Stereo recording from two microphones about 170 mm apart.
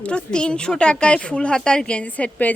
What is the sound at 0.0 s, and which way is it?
Speech, 5° left (ahead or behind).